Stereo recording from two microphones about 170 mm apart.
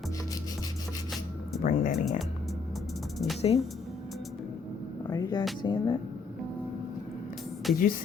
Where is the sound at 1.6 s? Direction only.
50° left (ahead or behind).